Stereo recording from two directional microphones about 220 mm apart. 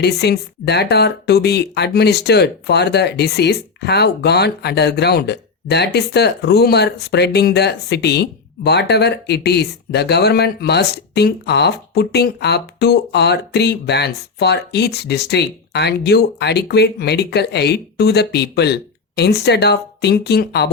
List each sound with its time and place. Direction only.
0.0 s speech: 45° left (ahead or behind)